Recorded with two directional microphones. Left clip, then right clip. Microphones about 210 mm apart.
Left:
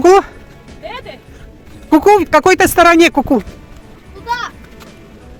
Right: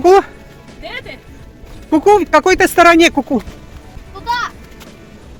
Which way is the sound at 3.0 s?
35° left (ahead or behind).